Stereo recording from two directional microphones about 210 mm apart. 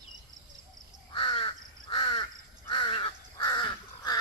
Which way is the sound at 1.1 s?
25° left (ahead or behind).